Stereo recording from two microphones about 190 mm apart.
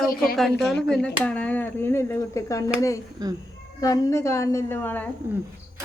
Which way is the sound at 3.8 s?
20° left (ahead or behind).